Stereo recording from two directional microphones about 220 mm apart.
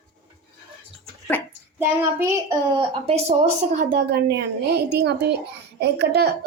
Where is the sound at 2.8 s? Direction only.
25° right (ahead or behind).